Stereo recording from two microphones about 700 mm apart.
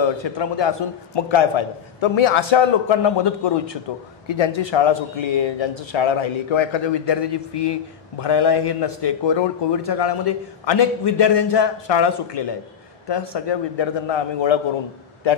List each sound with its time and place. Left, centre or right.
0.2 s a man's voice: left